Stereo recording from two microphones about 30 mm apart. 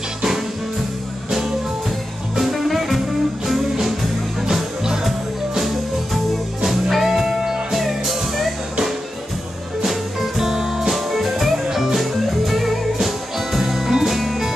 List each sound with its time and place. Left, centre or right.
2.3 s music: centre
4.5 s music: centre
6.6 s music: centre
9.8 s music: centre